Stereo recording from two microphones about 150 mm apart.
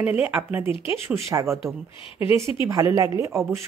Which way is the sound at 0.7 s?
35° left (ahead or behind).